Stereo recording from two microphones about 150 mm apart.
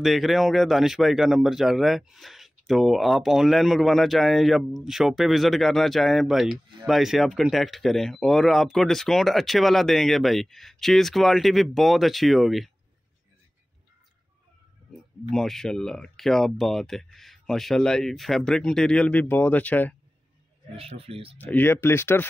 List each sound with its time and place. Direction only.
0.0 s speech: centre (ahead or behind)
15.3 s speech: centre (ahead or behind)
20.7 s speech: 40° right (ahead or behind)
21.4 s speech: 15° left (ahead or behind)